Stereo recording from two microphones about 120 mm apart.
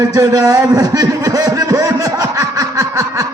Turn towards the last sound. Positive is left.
turn(degrees=-30)  # may be behind; listen again after turning